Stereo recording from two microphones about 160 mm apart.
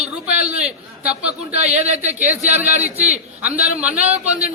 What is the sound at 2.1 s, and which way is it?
A man's voice, 10° right (ahead or behind).